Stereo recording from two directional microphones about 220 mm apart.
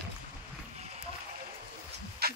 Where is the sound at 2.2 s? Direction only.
45° right (ahead or behind).